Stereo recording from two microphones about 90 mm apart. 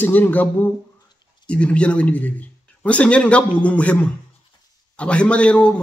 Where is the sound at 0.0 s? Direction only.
20° left (ahead or behind).